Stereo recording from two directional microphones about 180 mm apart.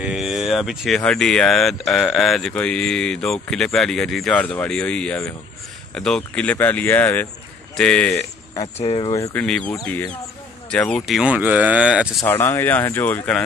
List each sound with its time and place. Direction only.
0.0 s speech: 5° right (ahead or behind)
8.7 s speech: 35° left (ahead or behind)
9.1 s speech: 15° left (ahead or behind); by 12.1 s 5° right (ahead or behind)
12.2 s speech: 15° left (ahead or behind)